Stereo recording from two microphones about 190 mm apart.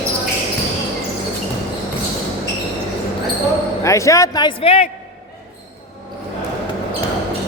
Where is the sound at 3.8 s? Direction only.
15° left (ahead or behind).